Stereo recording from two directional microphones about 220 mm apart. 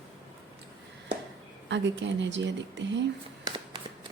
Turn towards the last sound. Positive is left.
turn(degrees=-55)  # may be behind; listen again after turning